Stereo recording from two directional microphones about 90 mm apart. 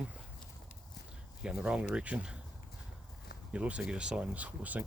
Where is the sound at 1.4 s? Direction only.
10° right (ahead or behind).